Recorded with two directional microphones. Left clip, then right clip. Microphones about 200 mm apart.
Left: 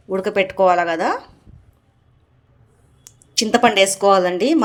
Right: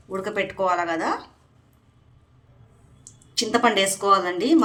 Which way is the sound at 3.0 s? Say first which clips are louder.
Left 5 dB; 35° left (ahead or behind).